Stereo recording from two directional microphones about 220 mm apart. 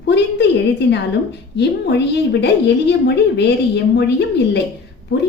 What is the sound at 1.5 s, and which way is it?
A woman's voice, 50° left (ahead or behind).